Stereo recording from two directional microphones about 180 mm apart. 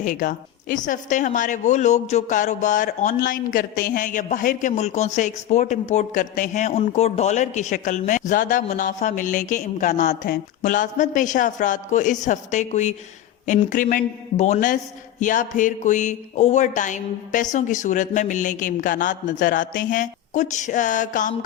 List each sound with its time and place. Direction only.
0.0 s a woman's voice: 45° left (ahead or behind)